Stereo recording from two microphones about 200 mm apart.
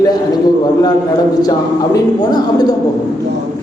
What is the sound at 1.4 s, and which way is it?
A woman's voice, 20° left (ahead or behind).